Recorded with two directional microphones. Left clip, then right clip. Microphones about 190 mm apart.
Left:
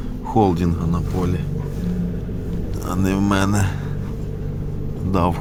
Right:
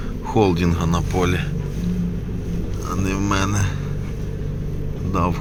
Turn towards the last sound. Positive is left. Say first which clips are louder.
# left 2 dB
turn(degrees=25)  # may be behind; listen again after turning